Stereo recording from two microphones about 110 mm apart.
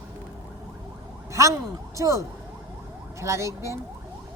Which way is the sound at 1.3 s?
30° right (ahead or behind).